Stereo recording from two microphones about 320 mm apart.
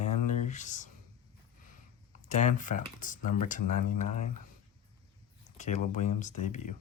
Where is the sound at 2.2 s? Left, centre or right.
Left.